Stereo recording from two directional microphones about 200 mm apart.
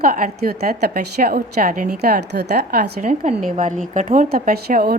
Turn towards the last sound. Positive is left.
turn(degrees=-50)  # may be behind; listen again after turning